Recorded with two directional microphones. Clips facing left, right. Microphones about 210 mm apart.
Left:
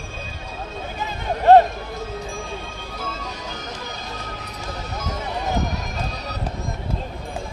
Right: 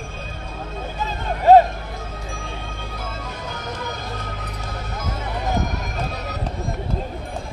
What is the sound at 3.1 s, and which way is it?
Music, 55° right (ahead or behind).